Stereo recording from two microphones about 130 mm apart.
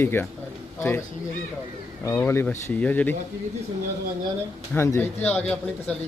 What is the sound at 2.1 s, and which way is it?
Speech, 20° left (ahead or behind).